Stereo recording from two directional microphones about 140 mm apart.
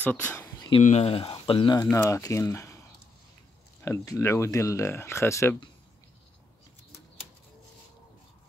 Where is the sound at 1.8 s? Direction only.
25° left (ahead or behind).